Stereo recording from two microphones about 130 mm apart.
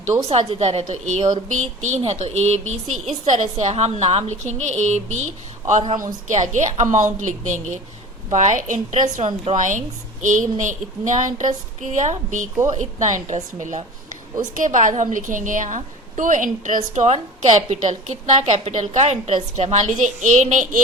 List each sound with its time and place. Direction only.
0.3 s a woman's voice: 50° right (ahead or behind); by 9.2 s 70° right (ahead or behind)
9.2 s a woman's voice: 45° right (ahead or behind)
9.6 s a woman's voice: 75° right (ahead or behind)
14.5 s a woman's voice: 80° right